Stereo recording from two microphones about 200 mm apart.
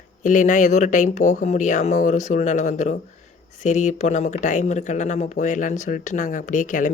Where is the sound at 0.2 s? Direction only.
40° left (ahead or behind).